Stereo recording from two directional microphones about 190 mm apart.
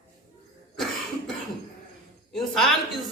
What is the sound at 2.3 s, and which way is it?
Speech, centre (ahead or behind).